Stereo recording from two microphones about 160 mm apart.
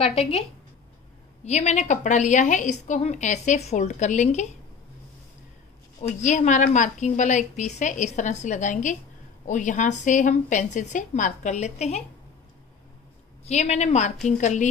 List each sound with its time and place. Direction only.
0.2 s a woman's voice: 40° left (ahead or behind)
5.9 s a woman's voice: 45° left (ahead or behind)
13.5 s a woman's voice: 45° left (ahead or behind)